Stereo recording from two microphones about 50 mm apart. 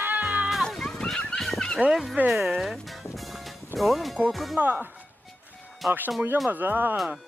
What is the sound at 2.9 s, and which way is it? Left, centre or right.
Music, centre.